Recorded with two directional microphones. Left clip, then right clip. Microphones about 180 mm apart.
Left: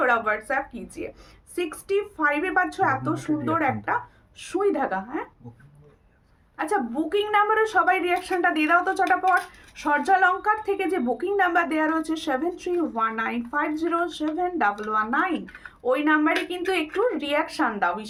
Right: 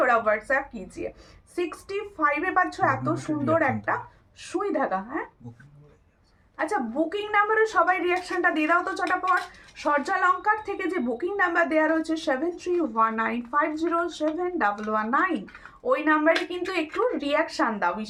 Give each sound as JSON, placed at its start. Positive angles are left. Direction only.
{"t": 0.0, "sound": "a woman's voice", "side_deg": 20}
{"t": 4.4, "sound": "a woman's voice", "side_deg": 20}
{"t": 7.1, "sound": "a woman's voice", "side_deg": 20}